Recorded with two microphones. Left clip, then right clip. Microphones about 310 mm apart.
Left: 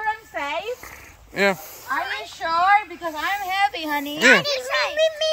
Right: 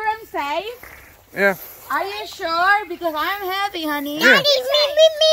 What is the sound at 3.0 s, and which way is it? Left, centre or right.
A woman's voice, centre.